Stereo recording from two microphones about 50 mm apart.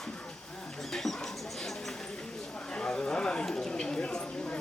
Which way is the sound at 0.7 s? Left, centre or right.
Centre.